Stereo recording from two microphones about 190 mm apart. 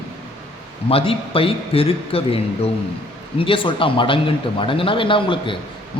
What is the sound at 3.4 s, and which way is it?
Speech, 25° left (ahead or behind).